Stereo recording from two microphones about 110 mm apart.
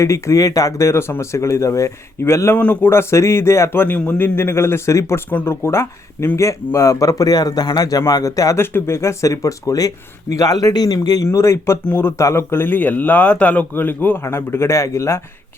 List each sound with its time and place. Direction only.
0.0 s a man's voice: 25° left (ahead or behind)